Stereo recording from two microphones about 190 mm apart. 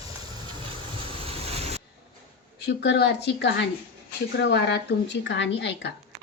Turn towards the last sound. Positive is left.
turn(degrees=65)  # may be behind; listen again after turning